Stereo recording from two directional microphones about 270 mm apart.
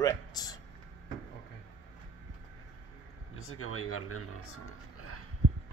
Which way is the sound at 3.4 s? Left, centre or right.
Left.